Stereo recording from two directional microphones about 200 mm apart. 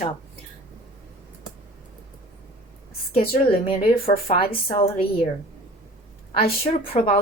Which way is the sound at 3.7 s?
30° left (ahead or behind).